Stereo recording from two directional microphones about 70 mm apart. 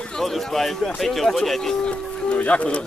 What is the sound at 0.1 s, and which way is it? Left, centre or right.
Speech, centre.